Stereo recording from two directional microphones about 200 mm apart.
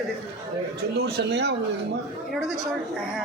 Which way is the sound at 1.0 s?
55° right (ahead or behind).